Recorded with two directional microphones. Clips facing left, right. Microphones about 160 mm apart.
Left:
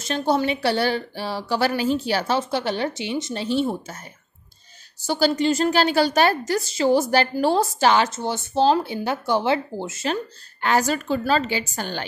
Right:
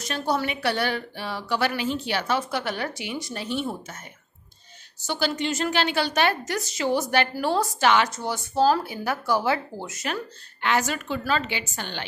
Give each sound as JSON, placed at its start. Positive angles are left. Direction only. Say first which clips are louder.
{"t": 0.0, "sound": "a woman's voice", "louder": "left 5 dB", "side_deg": 25}
{"t": 5.0, "sound": "a woman's voice", "louder": "left 6 dB", "side_deg": 35}
{"t": 10.6, "sound": "a woman's voice", "louder": "left 4 dB", "side_deg": 35}